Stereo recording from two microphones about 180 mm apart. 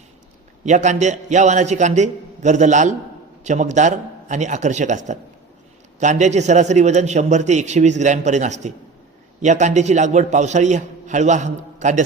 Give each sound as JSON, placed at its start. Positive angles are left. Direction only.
{"t": 0.6, "sound": "a man's voice", "side_deg": -40}